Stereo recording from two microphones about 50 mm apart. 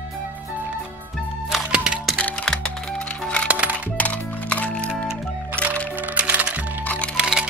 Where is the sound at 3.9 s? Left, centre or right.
Left.